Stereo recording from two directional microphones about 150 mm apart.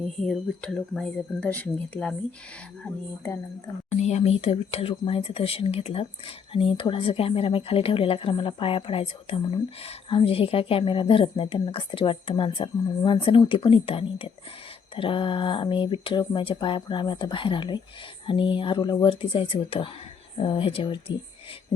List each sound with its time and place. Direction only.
0.2 s speech: 5° left (ahead or behind)
4.0 s speech: 45° left (ahead or behind)